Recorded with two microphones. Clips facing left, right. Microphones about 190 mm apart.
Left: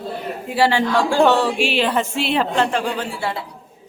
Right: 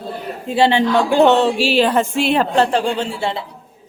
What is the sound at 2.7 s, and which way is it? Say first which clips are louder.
Speech: right 4 dB; 30° right (ahead or behind).